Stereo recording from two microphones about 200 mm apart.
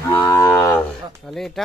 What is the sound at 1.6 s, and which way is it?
Cattle, centre (ahead or behind).